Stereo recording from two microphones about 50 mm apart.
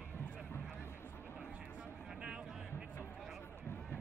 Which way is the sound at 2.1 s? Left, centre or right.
Centre.